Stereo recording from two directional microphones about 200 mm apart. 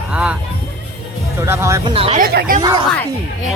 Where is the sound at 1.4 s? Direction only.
15° right (ahead or behind).